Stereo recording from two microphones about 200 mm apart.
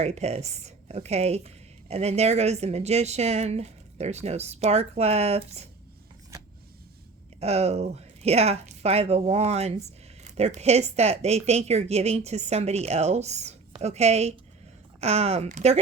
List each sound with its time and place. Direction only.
0.0 s speech: 30° right (ahead or behind)
7.3 s speech: 30° right (ahead or behind)